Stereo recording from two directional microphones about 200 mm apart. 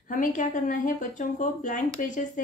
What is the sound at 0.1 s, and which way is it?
A woman's voice, 40° left (ahead or behind).